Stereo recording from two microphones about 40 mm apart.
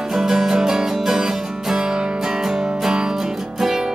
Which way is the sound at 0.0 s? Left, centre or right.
Centre.